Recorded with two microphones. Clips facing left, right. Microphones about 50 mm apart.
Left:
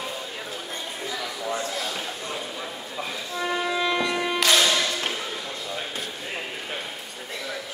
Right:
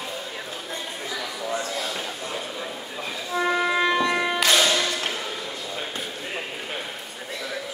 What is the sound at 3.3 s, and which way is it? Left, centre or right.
Music, right.